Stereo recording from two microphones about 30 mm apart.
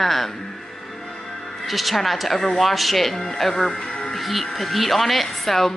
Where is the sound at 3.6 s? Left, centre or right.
Left.